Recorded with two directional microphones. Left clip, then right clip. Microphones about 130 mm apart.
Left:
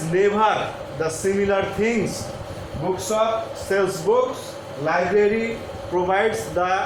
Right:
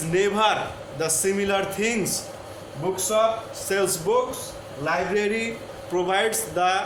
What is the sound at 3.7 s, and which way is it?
Speech, 45° right (ahead or behind).